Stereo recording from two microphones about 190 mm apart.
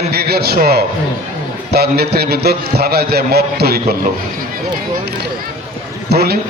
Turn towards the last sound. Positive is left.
turn(degrees=-55)  # may be behind; listen again after turning